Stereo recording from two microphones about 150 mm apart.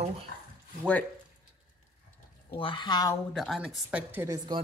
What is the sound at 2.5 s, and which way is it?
Speech, 35° left (ahead or behind).